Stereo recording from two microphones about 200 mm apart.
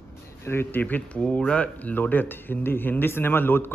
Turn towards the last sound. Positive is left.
turn(degrees=10)  # may be behind; listen again after turning